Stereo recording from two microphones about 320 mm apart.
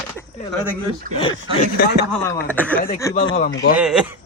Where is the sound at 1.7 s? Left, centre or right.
Left.